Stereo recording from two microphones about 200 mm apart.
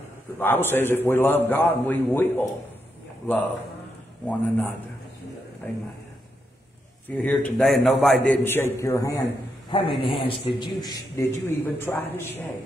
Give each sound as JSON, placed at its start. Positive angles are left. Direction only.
{"t": 0.4, "sound": "a man's voice", "side_deg": 10}
{"t": 4.3, "sound": "a man's voice", "side_deg": 5}
{"t": 7.1, "sound": "a man's voice", "side_deg": 5}
{"t": 9.7, "sound": "a man's voice", "side_deg": 25}